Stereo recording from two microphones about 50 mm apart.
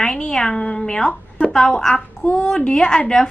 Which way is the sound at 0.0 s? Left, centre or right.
Centre.